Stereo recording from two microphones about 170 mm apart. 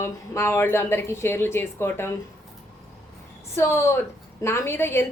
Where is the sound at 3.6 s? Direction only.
15° left (ahead or behind).